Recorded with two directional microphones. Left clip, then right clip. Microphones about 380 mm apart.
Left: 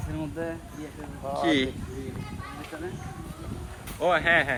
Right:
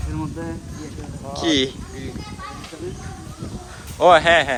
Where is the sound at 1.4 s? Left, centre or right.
Centre.